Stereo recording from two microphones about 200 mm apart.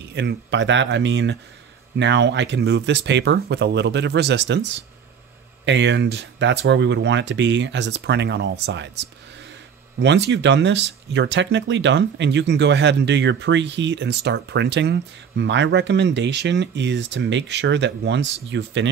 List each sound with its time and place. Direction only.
0.0 s speech: 55° right (ahead or behind)
5.7 s speech: 60° right (ahead or behind)
9.9 s speech: 60° right (ahead or behind)